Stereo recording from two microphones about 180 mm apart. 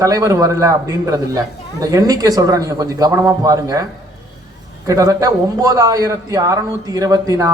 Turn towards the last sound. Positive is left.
turn(degrees=-20)  # may be behind; listen again after turning